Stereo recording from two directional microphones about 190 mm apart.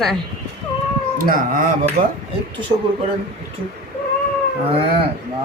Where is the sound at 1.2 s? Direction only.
45° right (ahead or behind).